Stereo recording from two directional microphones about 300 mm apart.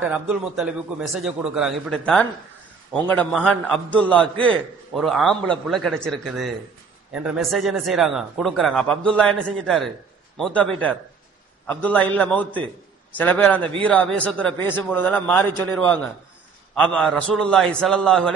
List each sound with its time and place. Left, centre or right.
0.1 s a man's voice: centre
16.7 s a man's voice: centre